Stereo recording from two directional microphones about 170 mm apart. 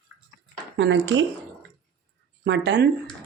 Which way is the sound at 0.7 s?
90° right.